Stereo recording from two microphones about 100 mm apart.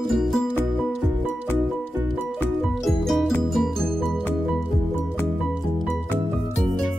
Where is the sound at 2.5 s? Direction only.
Centre (ahead or behind).